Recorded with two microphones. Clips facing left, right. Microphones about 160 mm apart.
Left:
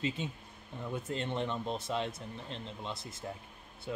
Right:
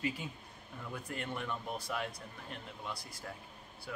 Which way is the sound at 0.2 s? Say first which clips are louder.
Left 5 dB; 25° left (ahead or behind).